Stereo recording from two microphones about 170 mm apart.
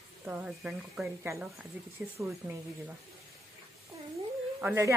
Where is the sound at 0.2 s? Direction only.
10° right (ahead or behind).